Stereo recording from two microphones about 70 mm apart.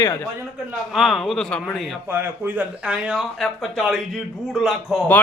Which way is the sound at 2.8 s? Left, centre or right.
Centre.